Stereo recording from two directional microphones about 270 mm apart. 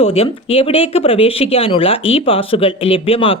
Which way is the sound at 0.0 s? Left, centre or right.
Left.